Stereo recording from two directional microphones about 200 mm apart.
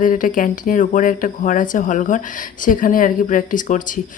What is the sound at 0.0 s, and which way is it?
Speech, 40° left (ahead or behind).